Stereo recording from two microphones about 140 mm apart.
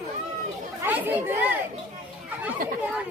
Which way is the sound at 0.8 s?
15° right (ahead or behind).